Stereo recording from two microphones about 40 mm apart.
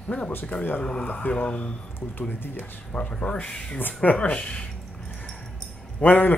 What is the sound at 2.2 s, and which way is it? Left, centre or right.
Speech, left.